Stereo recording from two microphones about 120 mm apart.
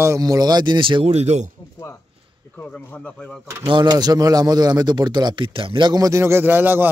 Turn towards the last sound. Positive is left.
turn(degrees=-15)  # may be behind; listen again after turning